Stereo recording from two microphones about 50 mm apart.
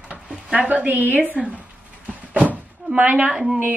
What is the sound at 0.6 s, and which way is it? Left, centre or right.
Speech, right.